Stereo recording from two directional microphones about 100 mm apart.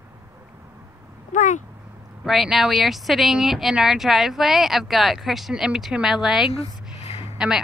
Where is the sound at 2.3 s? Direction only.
5° right (ahead or behind).